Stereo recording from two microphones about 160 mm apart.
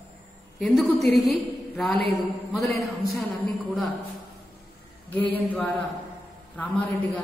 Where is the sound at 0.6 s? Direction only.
Centre (ahead or behind).